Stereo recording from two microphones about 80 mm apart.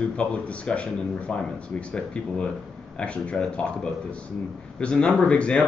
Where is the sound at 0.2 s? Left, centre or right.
Centre.